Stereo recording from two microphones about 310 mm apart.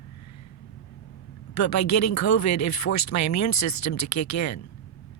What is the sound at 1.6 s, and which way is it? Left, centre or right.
Speech, left.